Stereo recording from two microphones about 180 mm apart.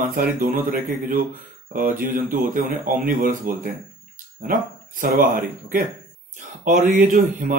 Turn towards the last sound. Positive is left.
turn(degrees=-45)  # may be behind; listen again after turning